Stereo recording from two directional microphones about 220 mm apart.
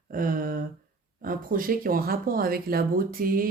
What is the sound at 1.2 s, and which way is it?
Speech, 40° right (ahead or behind).